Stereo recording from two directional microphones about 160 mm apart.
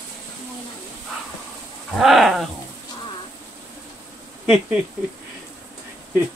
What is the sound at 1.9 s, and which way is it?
Owl, centre (ahead or behind).